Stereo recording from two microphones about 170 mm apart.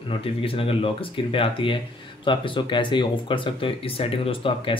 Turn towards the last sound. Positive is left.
turn(degrees=30)  # may be behind; listen again after turning